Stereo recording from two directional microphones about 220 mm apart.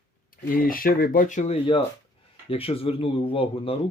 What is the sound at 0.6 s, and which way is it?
Speech, 40° left (ahead or behind).